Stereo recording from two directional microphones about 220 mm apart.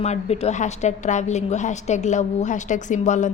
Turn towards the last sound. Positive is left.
turn(degrees=35)  # may be behind; listen again after turning